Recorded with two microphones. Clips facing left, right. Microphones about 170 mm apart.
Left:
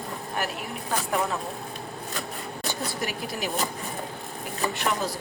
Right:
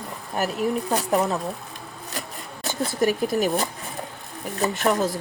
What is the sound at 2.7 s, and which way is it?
Speech, 45° right (ahead or behind).